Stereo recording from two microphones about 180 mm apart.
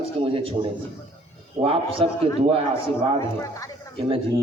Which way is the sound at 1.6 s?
35° right (ahead or behind).